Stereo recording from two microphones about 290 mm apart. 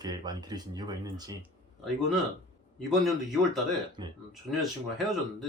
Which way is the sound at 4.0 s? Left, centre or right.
Centre.